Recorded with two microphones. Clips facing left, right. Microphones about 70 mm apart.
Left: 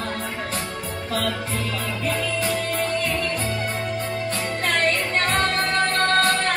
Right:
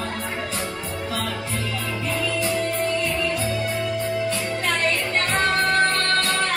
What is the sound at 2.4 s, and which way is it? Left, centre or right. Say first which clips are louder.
Music: right 1 dB; left.